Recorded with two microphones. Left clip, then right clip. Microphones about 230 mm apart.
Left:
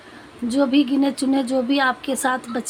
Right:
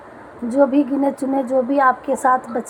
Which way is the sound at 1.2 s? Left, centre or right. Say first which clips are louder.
Right 2 dB; left.